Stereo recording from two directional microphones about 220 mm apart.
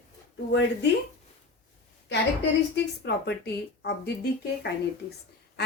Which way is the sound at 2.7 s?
50° left (ahead or behind).